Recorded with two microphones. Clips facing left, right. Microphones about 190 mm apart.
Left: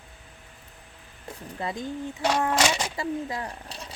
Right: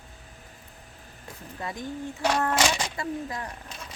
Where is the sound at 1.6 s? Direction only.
25° left (ahead or behind).